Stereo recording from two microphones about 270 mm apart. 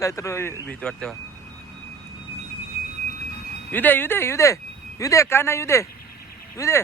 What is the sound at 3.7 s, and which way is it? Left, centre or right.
Speech, centre.